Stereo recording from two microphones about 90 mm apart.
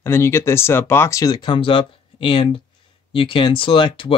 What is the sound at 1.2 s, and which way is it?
Speech, 50° left (ahead or behind).